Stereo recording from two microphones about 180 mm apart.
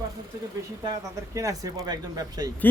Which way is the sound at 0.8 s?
20° right (ahead or behind).